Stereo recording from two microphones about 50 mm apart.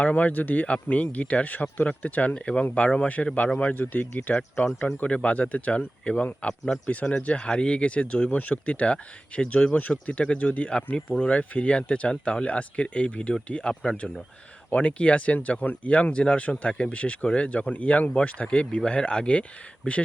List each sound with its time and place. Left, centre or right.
0.0 s speech: left
2.3 s speech: centre